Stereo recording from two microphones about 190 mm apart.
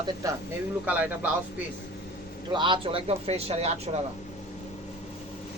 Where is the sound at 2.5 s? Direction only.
25° right (ahead or behind).